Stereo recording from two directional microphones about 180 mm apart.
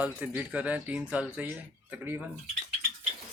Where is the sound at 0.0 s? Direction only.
10° right (ahead or behind).